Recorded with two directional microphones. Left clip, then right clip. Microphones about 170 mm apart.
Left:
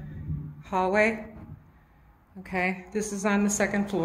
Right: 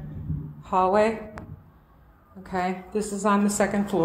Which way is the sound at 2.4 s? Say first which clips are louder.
Right 1 dB; 10° left (ahead or behind).